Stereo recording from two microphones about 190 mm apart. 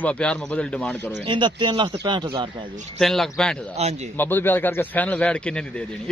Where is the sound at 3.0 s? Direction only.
Centre (ahead or behind).